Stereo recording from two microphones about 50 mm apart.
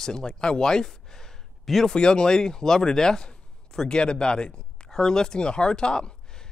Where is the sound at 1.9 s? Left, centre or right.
Centre.